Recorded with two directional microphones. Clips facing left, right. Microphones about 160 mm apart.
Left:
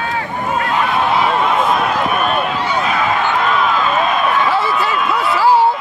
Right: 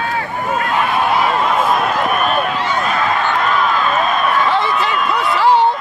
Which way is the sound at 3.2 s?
Centre (ahead or behind).